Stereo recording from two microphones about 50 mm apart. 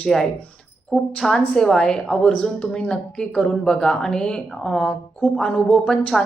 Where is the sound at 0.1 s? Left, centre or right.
Centre.